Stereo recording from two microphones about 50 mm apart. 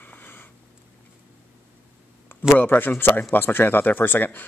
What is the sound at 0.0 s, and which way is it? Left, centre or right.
Sniff, left.